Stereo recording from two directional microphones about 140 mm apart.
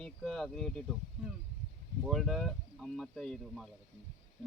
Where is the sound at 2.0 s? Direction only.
Centre (ahead or behind).